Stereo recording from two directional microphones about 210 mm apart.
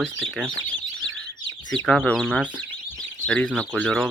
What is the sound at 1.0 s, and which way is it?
Bird, centre (ahead or behind).